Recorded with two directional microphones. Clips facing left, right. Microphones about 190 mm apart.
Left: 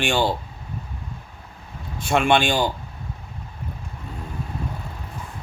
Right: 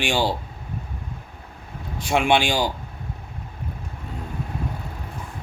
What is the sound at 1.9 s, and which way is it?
Speech, 15° right (ahead or behind).